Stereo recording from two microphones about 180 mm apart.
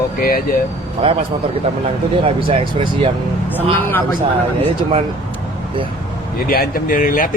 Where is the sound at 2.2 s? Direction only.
30° right (ahead or behind).